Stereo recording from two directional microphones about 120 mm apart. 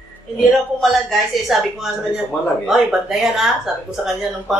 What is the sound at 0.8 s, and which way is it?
Speech, centre (ahead or behind).